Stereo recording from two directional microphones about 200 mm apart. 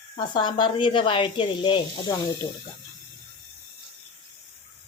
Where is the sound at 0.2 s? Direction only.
20° left (ahead or behind).